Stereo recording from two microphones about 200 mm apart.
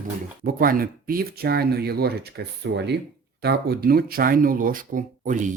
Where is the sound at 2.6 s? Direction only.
65° right (ahead or behind).